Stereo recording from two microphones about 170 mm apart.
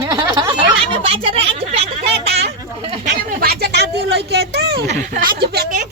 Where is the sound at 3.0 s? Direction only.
65° right (ahead or behind).